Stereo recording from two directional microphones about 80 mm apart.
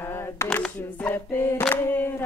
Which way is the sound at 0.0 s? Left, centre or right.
Left.